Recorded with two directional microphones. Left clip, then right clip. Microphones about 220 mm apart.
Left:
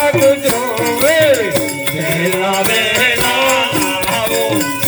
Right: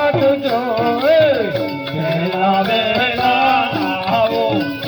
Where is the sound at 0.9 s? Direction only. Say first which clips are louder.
Left 2 dB; 25° right (ahead or behind).